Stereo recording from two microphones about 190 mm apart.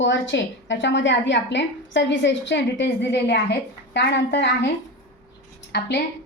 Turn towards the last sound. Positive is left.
turn(degrees=60)  # may be behind; listen again after turning